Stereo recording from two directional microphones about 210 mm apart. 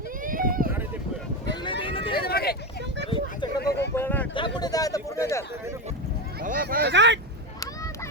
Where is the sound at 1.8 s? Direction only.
25° left (ahead or behind).